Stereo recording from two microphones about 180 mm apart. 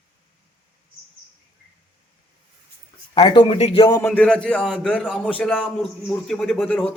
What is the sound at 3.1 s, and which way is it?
Speech, 30° left (ahead or behind).